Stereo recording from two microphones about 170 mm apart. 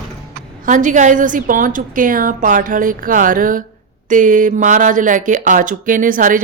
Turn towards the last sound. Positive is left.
turn(degrees=-50)  # may be behind; listen again after turning